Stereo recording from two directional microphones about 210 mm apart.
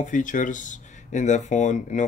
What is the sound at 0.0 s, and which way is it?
Speech, 40° left (ahead or behind).